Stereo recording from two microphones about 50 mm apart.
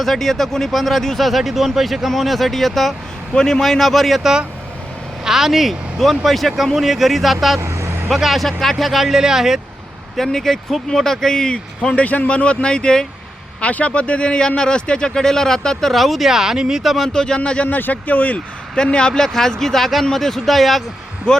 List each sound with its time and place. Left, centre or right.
0.0 s speech: centre
7.6 s vehicle: right
8.1 s speech: centre
10.2 s speech: centre
15.9 s speech: centre
17.1 s speech: centre
17.7 s speech: left
18.7 s speech: centre
21.3 s speech: centre